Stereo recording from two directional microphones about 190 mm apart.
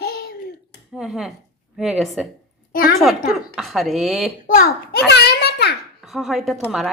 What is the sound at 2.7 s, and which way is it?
Speech, 50° left (ahead or behind).